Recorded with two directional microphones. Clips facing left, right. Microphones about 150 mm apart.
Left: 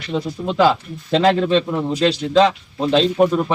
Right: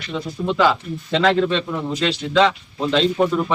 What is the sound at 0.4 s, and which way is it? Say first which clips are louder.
Speech: left 1 dB; 35° left (ahead or behind).